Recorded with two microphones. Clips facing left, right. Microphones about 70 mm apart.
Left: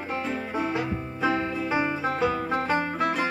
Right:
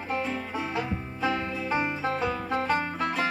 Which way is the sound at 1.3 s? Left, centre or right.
Left.